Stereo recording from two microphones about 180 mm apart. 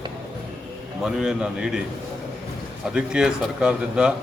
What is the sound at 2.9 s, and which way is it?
Speech, 5° right (ahead or behind).